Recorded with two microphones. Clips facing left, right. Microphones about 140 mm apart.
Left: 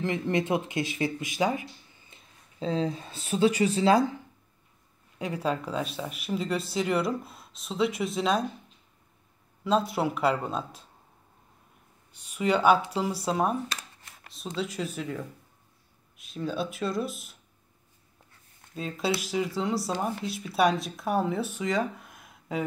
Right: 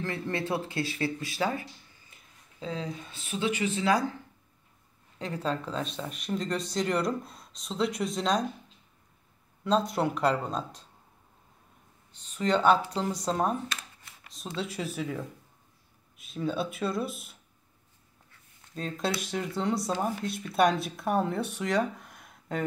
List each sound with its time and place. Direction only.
0.0 s speech: 15° left (ahead or behind)
2.1 s speech: 30° left (ahead or behind)
5.2 s speech: 10° left (ahead or behind)
9.7 s speech: 5° left (ahead or behind)
12.1 s speech: 10° left (ahead or behind)
18.8 s speech: 5° left (ahead or behind)